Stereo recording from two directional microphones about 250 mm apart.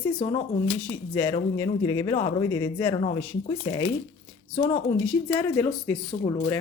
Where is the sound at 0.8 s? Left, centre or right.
Centre.